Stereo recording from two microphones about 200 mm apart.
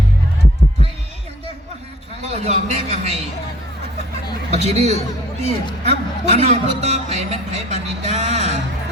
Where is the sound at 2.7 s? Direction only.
35° right (ahead or behind).